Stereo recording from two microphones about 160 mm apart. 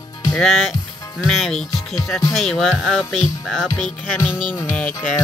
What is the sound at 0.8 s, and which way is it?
Music, 20° left (ahead or behind).